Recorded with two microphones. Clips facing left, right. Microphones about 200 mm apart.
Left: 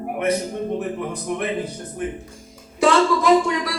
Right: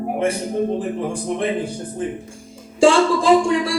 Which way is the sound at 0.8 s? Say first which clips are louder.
Right 3 dB; 30° right (ahead or behind).